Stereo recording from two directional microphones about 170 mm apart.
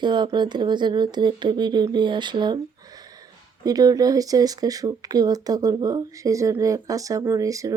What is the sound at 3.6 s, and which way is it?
Speech, 20° right (ahead or behind).